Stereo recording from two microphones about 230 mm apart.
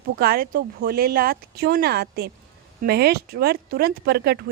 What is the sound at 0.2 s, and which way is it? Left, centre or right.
Speech, right.